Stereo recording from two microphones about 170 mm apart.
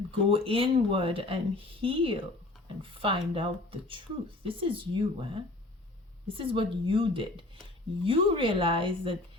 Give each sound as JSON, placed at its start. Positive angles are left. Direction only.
{"t": 0.1, "sound": "speech", "side_deg": -35}